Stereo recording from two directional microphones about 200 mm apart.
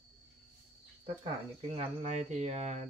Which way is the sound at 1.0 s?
30° right (ahead or behind).